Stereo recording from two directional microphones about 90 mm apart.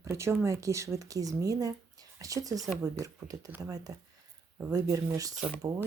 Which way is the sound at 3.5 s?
25° right (ahead or behind).